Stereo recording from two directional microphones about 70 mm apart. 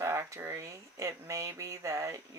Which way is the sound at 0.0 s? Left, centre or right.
Right.